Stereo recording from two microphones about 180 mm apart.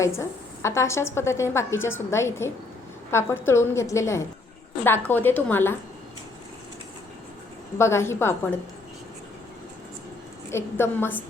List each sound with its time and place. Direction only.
0.0 s a woman's voice: 15° left (ahead or behind)
7.8 s a woman's voice: 15° left (ahead or behind)
10.5 s a woman's voice: 10° left (ahead or behind)